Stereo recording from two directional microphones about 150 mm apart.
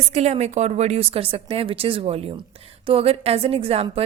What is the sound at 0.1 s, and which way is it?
Speech, 45° right (ahead or behind).